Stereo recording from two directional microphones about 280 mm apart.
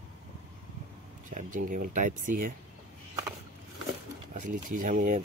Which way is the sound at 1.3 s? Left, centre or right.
Right.